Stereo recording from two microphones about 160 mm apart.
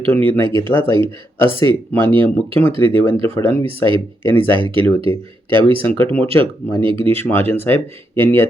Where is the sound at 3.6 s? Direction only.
30° right (ahead or behind).